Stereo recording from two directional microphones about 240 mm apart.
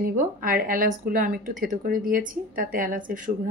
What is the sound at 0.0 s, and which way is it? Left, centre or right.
Speech, right.